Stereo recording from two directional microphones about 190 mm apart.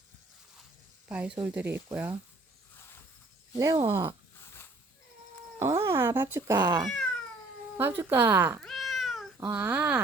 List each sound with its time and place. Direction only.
1.0 s speech: 5° right (ahead or behind)
3.6 s speech: 15° right (ahead or behind)
5.5 s speech: 15° right (ahead or behind)
6.8 s cat: centre (ahead or behind)
7.8 s speech: 10° right (ahead or behind)
8.6 s cat: centre (ahead or behind)
9.5 s speech: 10° right (ahead or behind)